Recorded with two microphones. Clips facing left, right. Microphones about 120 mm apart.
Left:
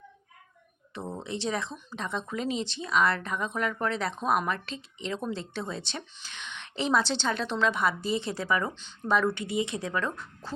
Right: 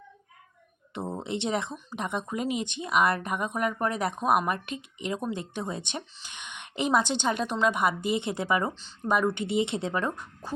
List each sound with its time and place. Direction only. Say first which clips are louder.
0.9 s speech: right 3 dB; 20° right (ahead or behind)
8.7 s speech: even; 35° right (ahead or behind)
9.0 s speech: right 1 dB; 15° right (ahead or behind)